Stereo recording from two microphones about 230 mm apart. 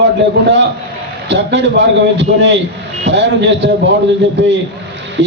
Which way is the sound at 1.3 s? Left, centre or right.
Right.